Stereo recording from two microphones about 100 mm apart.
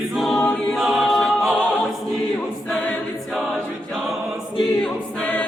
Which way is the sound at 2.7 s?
10° left (ahead or behind).